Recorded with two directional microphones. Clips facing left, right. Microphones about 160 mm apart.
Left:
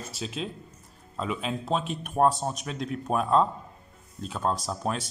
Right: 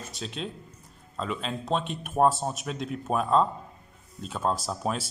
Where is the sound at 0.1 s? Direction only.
5° left (ahead or behind).